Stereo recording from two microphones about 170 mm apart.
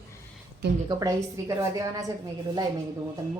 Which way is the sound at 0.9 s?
20° right (ahead or behind).